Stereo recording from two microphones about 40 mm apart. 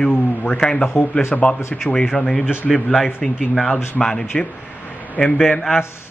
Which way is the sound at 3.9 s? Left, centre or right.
Centre.